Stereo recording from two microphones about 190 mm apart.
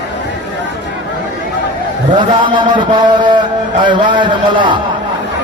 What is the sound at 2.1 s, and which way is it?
A man's voice, 25° right (ahead or behind).